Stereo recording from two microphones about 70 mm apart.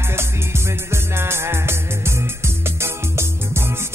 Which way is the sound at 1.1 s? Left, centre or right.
Right.